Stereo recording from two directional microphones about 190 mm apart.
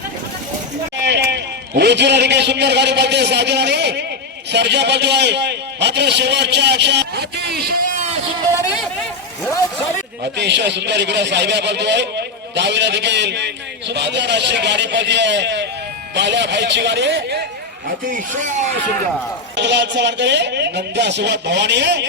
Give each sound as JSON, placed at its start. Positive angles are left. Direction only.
{"t": 1.0, "sound": "a man's voice", "side_deg": -65}
{"t": 10.3, "sound": "speech", "side_deg": -65}
{"t": 18.0, "sound": "a man's voice", "side_deg": -45}
{"t": 19.5, "sound": "speech", "side_deg": -65}